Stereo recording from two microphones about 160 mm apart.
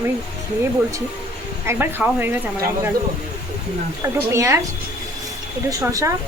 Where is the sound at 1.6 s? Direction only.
15° right (ahead or behind).